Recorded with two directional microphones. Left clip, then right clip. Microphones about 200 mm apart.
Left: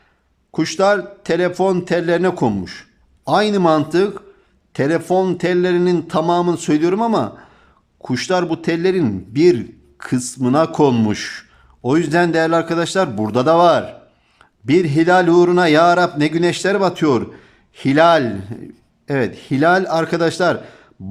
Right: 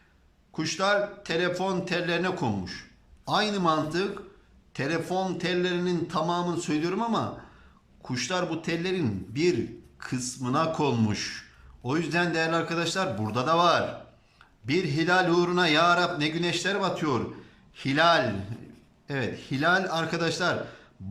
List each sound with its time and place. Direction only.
0.5 s speech: 40° left (ahead or behind)